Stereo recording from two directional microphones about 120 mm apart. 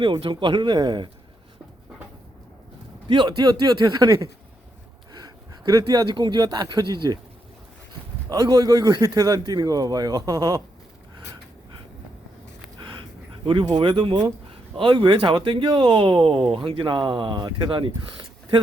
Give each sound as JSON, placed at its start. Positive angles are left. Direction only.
{"t": 0.0, "sound": "speech", "side_deg": -45}
{"t": 3.1, "sound": "speech", "side_deg": -40}
{"t": 8.3, "sound": "speech", "side_deg": -35}
{"t": 13.4, "sound": "speech", "side_deg": -45}